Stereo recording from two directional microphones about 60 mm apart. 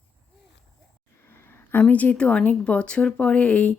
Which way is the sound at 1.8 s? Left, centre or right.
Left.